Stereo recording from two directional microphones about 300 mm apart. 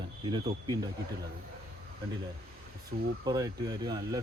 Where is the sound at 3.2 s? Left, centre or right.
Centre.